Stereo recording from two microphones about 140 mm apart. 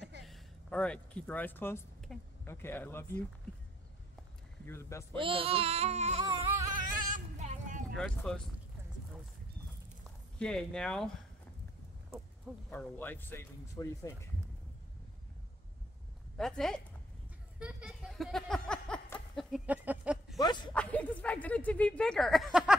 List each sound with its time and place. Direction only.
0.0 s a sound: centre (ahead or behind)
2.1 s speech: centre (ahead or behind)
2.4 s speech: 15° left (ahead or behind)
4.6 s speech: 20° left (ahead or behind)
5.1 s speech: 40° right (ahead or behind)
6.7 s a sound: 70° right (ahead or behind)
8.3 s speech: 5° left (ahead or behind)
10.4 s speech: 5° left (ahead or behind)
12.6 s speech: 10° left (ahead or behind)
16.3 s speech: 5° left (ahead or behind)
17.6 s speech: 5° right (ahead or behind)
19.6 s a sound: 10° right (ahead or behind)
20.3 s speech: 30° left (ahead or behind)
20.7 s speech: 10° left (ahead or behind)